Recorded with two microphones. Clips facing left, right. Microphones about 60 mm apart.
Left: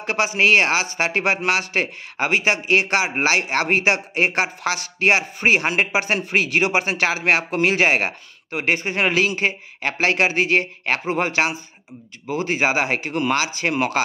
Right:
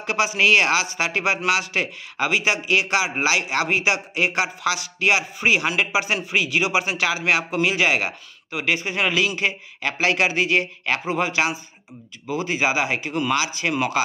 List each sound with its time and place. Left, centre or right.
0.0 s speech: left